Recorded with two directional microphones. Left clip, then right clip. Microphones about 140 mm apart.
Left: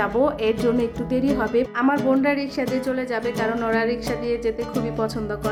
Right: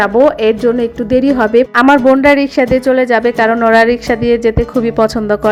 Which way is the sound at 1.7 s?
50° right (ahead or behind).